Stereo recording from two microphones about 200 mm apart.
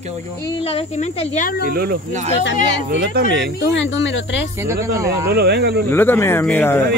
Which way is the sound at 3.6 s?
65° left (ahead or behind).